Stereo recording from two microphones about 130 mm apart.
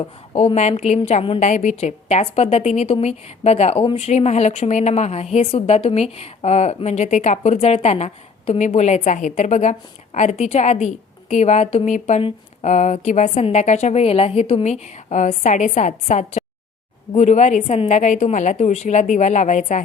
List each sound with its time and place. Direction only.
0.3 s a woman's voice: 60° left (ahead or behind)
1.4 s a woman's voice: 65° left (ahead or behind)